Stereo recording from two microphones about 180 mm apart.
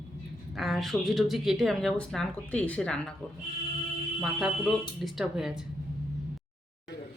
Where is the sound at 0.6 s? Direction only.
Centre (ahead or behind).